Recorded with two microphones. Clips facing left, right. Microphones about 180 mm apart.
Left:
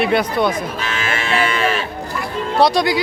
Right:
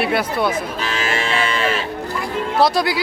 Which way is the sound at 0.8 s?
35° right (ahead or behind).